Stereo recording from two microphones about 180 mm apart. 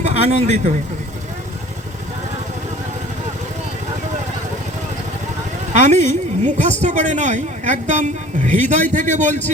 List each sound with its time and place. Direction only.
0.0 s a man's voice: 35° right (ahead or behind)
5.7 s a woman's voice: 40° right (ahead or behind)